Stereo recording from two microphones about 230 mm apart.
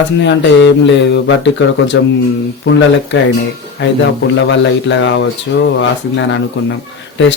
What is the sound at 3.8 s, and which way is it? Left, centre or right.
Speech, left.